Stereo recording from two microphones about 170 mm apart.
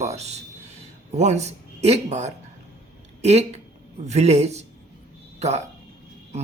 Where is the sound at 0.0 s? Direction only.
40° right (ahead or behind).